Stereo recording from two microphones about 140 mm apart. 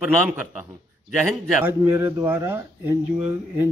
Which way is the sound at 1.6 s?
15° right (ahead or behind).